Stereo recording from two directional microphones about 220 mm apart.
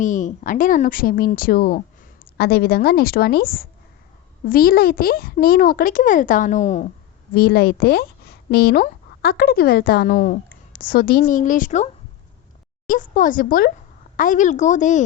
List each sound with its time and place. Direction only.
0.0 s a child's voice: 35° left (ahead or behind)
7.3 s a child's voice: 45° left (ahead or behind)
12.9 s a child's voice: 35° left (ahead or behind)